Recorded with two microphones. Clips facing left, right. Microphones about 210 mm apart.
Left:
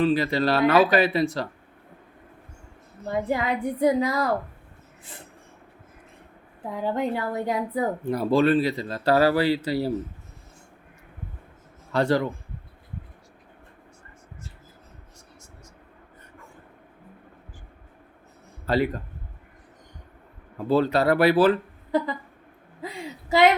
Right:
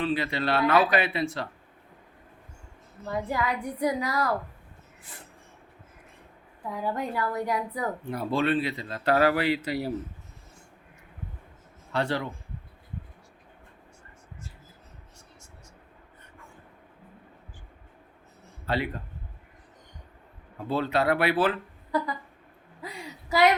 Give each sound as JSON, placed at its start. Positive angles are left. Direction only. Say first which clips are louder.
{"t": 0.0, "sound": "speech", "louder": "left 6 dB", "side_deg": 40}
{"t": 3.1, "sound": "a woman's voice", "louder": "left 4 dB", "side_deg": 25}
{"t": 6.7, "sound": "a woman's voice", "louder": "left 4 dB", "side_deg": 25}
{"t": 8.1, "sound": "speech", "louder": "left 6 dB", "side_deg": 40}
{"t": 11.9, "sound": "speech", "louder": "left 6 dB", "side_deg": 40}
{"t": 18.6, "sound": "speech", "louder": "left 6 dB", "side_deg": 40}
{"t": 20.7, "sound": "speech", "louder": "left 5 dB", "side_deg": 40}
{"t": 21.9, "sound": "a woman's voice", "louder": "left 4 dB", "side_deg": 25}